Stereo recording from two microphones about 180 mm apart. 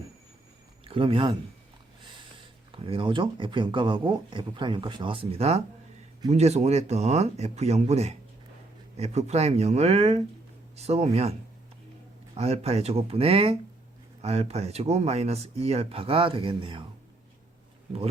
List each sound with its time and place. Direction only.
0.9 s speech: 30° right (ahead or behind)
2.7 s speech: 30° right (ahead or behind)